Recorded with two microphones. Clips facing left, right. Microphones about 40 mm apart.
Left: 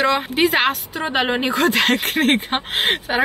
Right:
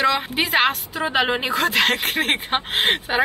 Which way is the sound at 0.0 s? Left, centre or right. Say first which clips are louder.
Left 3 dB; centre.